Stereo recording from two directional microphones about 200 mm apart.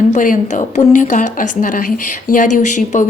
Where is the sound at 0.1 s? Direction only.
40° left (ahead or behind).